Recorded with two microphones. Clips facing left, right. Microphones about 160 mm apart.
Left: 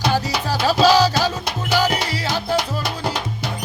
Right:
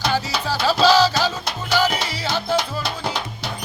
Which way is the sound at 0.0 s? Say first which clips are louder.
Left 2 dB; 15° left (ahead or behind).